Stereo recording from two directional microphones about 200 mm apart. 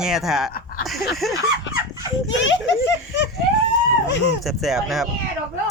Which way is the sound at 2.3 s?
65° left (ahead or behind).